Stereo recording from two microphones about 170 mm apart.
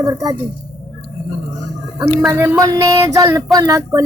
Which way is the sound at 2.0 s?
15° right (ahead or behind).